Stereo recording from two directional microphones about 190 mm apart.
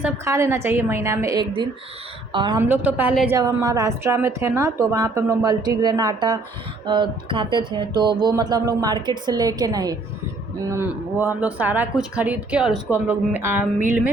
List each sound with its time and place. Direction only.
0.3 s a woman's voice: 15° right (ahead or behind)
2.6 s a woman's voice: 10° right (ahead or behind)